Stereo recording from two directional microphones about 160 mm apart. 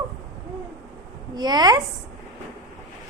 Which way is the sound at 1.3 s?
25° right (ahead or behind).